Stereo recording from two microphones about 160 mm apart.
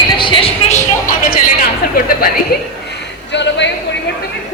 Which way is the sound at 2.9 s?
90° left.